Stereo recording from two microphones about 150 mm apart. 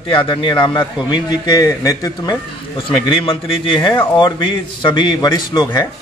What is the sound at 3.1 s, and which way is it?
A man's voice, 35° left (ahead or behind).